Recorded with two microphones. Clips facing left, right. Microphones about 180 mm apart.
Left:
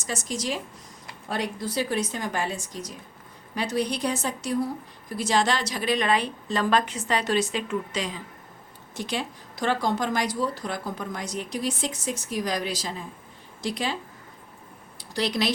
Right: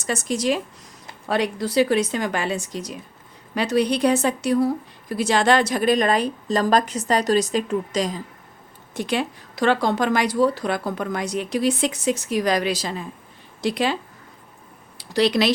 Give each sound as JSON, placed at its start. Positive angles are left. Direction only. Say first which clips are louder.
{"t": 0.0, "sound": "speech", "louder": "right 7 dB", "side_deg": -60}
{"t": 1.3, "sound": "a woman's voice", "louder": "right 7 dB", "side_deg": -80}
{"t": 9.0, "sound": "speech", "louder": "right 6 dB", "side_deg": -60}
{"t": 14.9, "sound": "speech", "louder": "right 8 dB", "side_deg": -75}